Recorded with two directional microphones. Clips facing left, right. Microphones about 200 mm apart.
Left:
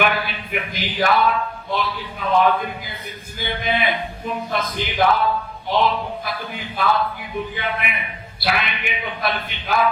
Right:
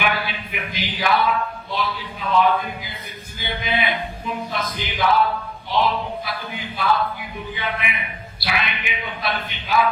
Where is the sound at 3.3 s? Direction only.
55° left (ahead or behind).